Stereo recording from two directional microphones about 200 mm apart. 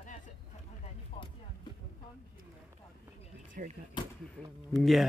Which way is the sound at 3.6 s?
45° right (ahead or behind).